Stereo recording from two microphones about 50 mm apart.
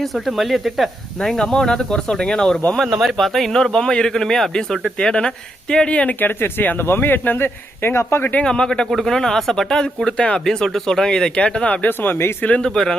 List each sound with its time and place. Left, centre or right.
0.0 s speech: centre
1.2 s a man's voice: centre
2.7 s a man's voice: centre
4.9 s a man's voice: centre
5.9 s speech: left
6.1 s speech: left
7.9 s speech: left
8.4 s a man's voice: centre
8.9 s a man's voice: centre
10.4 s a man's voice: centre; by 11.9 s left
11.9 s speech: left
12.5 s speech: centre
12.7 s a man's voice: centre